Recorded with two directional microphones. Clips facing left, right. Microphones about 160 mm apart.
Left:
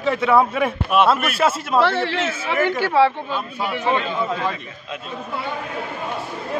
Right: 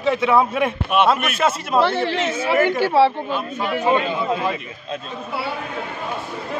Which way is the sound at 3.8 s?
15° right (ahead or behind).